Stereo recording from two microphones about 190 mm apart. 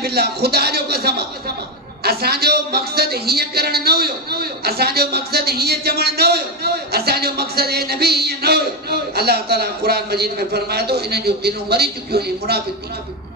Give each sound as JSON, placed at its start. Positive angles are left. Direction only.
{"t": 0.0, "sound": "speech", "side_deg": -55}